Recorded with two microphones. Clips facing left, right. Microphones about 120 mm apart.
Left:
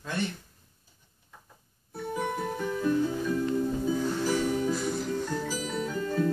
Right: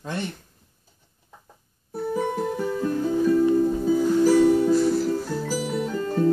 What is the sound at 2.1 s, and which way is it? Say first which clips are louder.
Music: right 5 dB; 35° right (ahead or behind).